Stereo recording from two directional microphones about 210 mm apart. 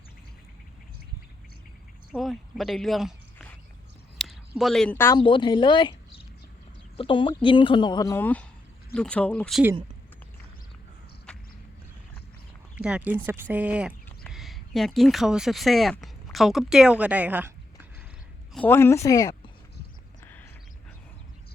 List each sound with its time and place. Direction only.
2.1 s speech: centre (ahead or behind)
5.2 s speech: 25° left (ahead or behind); by 9.6 s centre (ahead or behind)
11.3 s walk: 5° left (ahead or behind)
12.7 s speech: 5° right (ahead or behind)
18.5 s speech: 10° left (ahead or behind)
20.2 s a sound: 10° left (ahead or behind)